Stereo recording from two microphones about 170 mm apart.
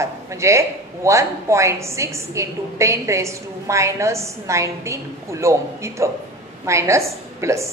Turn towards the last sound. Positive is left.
turn(degrees=-15)  # may be behind; listen again after turning